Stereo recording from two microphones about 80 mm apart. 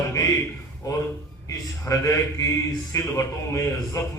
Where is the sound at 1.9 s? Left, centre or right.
Left.